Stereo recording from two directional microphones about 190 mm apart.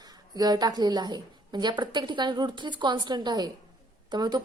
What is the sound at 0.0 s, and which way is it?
A woman's voice, 20° right (ahead or behind).